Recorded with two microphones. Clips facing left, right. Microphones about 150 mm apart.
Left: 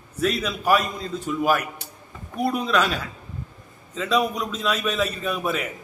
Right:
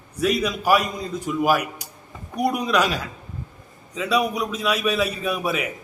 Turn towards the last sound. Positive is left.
turn(degrees=-10)  # may be behind; listen again after turning